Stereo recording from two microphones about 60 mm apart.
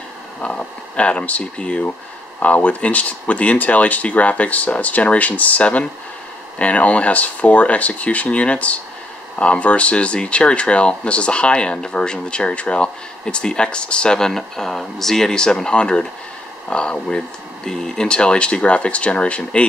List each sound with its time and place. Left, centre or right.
0.4 s speech: centre